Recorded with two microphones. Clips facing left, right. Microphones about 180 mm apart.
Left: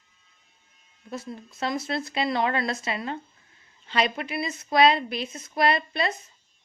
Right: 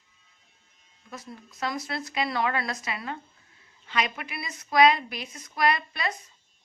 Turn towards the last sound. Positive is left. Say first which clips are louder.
# left 2 dB
turn(degrees=25)  # may be behind; listen again after turning